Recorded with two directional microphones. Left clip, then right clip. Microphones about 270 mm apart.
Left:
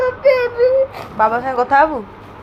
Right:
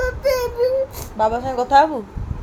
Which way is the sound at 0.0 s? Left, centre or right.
Right.